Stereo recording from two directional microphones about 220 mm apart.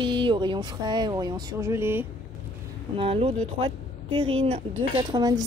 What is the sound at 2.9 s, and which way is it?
Speech, 25° right (ahead or behind).